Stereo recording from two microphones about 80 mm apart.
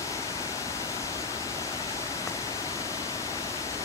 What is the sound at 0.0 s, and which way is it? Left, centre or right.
Pink noise, left.